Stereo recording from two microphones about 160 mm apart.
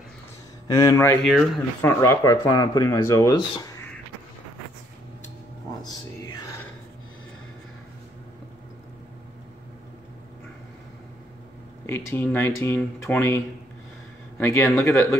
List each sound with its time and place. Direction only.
0.7 s speech: 20° left (ahead or behind)
11.8 s speech: 15° left (ahead or behind)
14.4 s speech: 15° left (ahead or behind)